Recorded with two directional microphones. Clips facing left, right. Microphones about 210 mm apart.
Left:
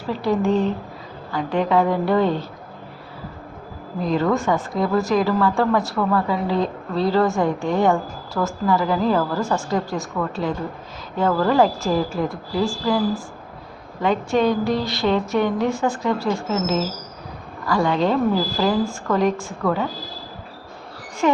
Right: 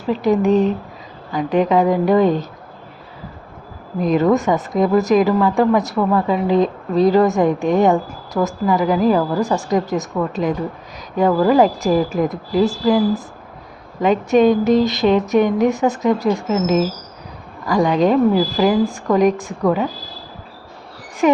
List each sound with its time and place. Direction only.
0.1 s a woman's voice: 20° right (ahead or behind)
4.0 s a woman's voice: 20° right (ahead or behind)